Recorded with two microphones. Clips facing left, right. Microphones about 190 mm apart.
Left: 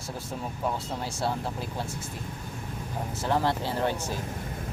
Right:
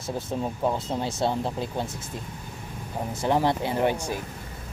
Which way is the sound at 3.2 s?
15° right (ahead or behind).